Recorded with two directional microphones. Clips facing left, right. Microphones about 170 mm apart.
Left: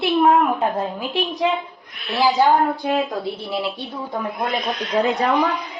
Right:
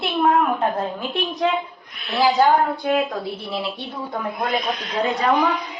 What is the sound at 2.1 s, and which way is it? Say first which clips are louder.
A woman's voice: even; centre (ahead or behind).